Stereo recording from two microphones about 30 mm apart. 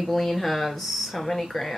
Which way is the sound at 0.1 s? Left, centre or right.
Centre.